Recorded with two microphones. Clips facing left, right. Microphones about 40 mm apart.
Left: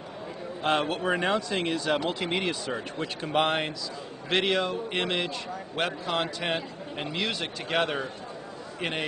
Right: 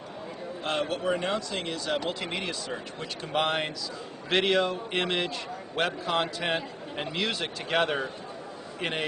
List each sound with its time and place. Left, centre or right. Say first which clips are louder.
0.7 s speech: left 3 dB; centre
2.0 s a man's voice: left 3 dB; centre